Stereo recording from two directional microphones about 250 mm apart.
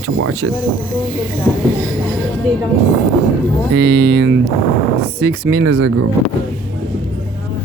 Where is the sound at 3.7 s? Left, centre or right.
Right.